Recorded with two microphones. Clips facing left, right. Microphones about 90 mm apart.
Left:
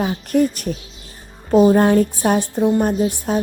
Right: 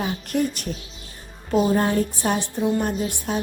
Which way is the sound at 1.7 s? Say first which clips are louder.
Left 7 dB; 50° left (ahead or behind).